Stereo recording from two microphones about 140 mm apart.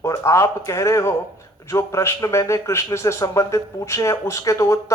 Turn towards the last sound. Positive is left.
turn(degrees=20)  # may be behind; listen again after turning